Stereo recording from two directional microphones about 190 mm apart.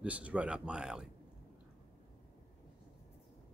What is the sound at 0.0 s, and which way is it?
Speech, 5° right (ahead or behind).